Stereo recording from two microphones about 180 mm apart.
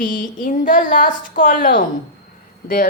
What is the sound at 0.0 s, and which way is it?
A woman's voice, 50° left (ahead or behind).